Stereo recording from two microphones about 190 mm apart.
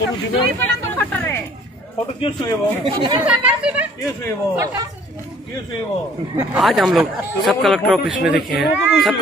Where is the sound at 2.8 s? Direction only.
25° right (ahead or behind).